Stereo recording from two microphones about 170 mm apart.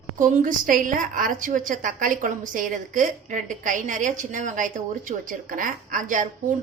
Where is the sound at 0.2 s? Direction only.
50° right (ahead or behind).